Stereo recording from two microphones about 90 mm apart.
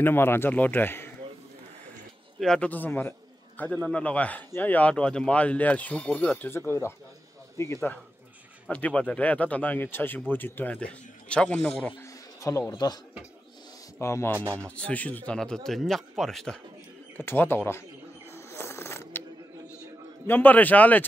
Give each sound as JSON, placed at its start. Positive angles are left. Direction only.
{"t": 0.0, "sound": "speech", "side_deg": 25}
{"t": 2.4, "sound": "speech", "side_deg": 5}
{"t": 2.7, "sound": "a man's voice", "side_deg": 20}
{"t": 7.5, "sound": "speech", "side_deg": 30}
{"t": 8.6, "sound": "speech", "side_deg": 15}
{"t": 12.4, "sound": "speech", "side_deg": 35}
{"t": 12.7, "sound": "speech", "side_deg": 50}
{"t": 13.9, "sound": "a man's voice", "side_deg": 30}
{"t": 14.3, "sound": "speech", "side_deg": -30}
{"t": 14.8, "sound": "speech", "side_deg": 15}
{"t": 17.2, "sound": "speech", "side_deg": 25}
{"t": 18.3, "sound": "a sound", "side_deg": 30}
{"t": 20.2, "sound": "speech", "side_deg": 20}